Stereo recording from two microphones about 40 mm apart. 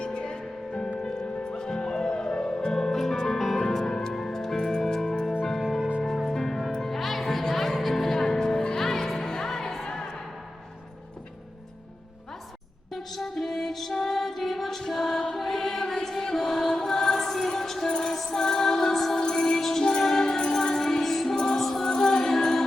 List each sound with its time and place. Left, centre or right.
0.0 s music: left
12.9 s music: centre